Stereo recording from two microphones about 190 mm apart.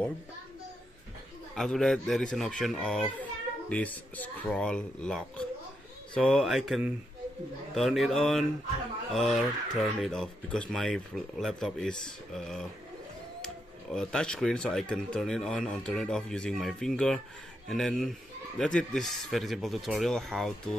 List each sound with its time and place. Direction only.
1.5 s a child's voice: centre (ahead or behind)